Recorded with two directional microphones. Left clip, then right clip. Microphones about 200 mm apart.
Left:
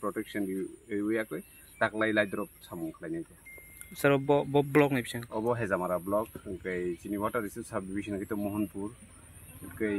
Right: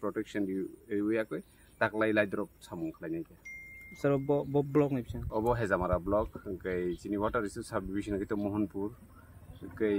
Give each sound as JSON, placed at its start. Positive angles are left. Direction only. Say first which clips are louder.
{"t": 0.0, "sound": "speech", "louder": "left 1 dB", "side_deg": -25}
{"t": 3.9, "sound": "speech", "louder": "left 4 dB", "side_deg": 0}
{"t": 5.3, "sound": "speech", "louder": "right 1 dB", "side_deg": -30}